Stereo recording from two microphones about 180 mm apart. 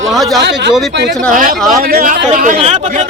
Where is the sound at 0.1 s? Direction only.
Centre (ahead or behind).